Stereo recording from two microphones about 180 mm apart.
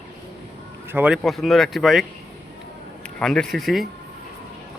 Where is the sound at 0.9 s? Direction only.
5° right (ahead or behind).